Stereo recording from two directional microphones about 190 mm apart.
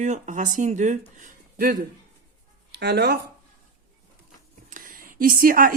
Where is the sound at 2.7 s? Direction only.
65° right (ahead or behind).